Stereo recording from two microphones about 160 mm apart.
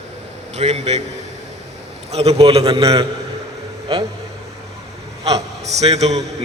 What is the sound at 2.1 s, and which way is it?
Speech, 40° right (ahead or behind).